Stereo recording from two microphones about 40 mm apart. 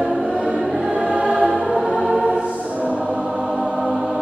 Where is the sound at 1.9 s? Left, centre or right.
Centre.